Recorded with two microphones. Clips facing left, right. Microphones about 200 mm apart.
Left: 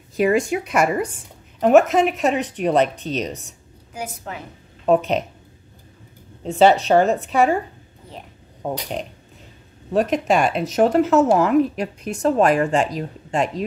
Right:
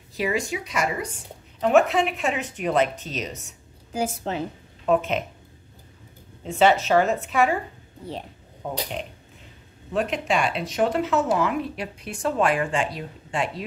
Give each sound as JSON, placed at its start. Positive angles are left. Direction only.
{"t": 0.2, "sound": "speech", "side_deg": 50}
{"t": 1.6, "sound": "speech", "side_deg": 45}
{"t": 3.9, "sound": "a woman's voice", "side_deg": -30}
{"t": 4.8, "sound": "speech", "side_deg": 35}
{"t": 6.4, "sound": "speech", "side_deg": 35}
{"t": 8.6, "sound": "speech", "side_deg": 40}
{"t": 9.9, "sound": "speech", "side_deg": 45}